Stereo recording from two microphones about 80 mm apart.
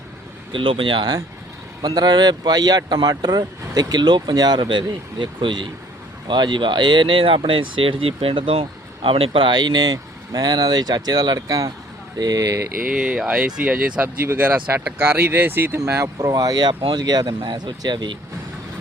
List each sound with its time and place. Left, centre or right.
0.5 s speech: right
12.9 s speech: centre
15.8 s speech: right